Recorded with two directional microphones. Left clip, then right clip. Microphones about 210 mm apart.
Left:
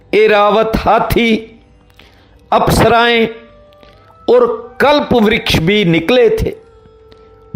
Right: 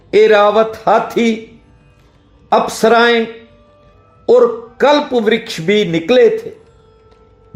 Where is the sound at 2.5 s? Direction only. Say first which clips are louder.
Left 1 dB; 30° left (ahead or behind).